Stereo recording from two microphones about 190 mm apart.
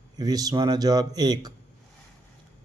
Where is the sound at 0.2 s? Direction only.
20° right (ahead or behind).